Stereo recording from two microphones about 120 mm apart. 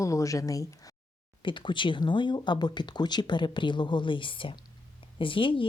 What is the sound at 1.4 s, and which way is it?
A woman's voice, 40° left (ahead or behind).